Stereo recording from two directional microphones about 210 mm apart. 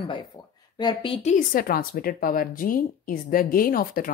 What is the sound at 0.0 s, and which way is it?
A woman's voice, 25° left (ahead or behind).